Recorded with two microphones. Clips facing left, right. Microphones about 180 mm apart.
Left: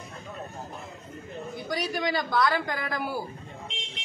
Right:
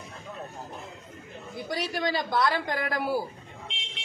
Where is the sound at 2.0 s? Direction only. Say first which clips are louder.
Even; 25° right (ahead or behind).